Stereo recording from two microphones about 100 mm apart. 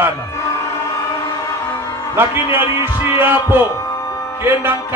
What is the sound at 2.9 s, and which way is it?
Music, 50° left (ahead or behind).